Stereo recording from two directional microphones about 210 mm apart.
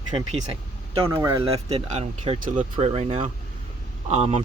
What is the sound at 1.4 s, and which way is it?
Speech, 30° right (ahead or behind).